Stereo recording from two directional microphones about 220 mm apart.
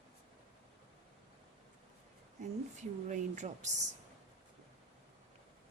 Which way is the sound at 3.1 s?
35° right (ahead or behind).